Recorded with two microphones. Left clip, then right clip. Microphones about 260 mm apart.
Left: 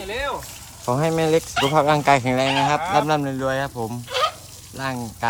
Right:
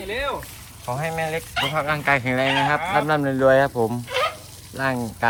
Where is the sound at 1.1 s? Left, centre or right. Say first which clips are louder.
Left 5 dB; left.